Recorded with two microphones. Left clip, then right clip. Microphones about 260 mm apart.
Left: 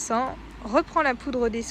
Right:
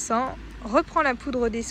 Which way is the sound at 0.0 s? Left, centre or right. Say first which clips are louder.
Right 1 dB; centre.